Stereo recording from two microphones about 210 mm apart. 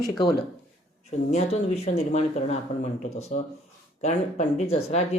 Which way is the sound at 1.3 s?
30° left (ahead or behind).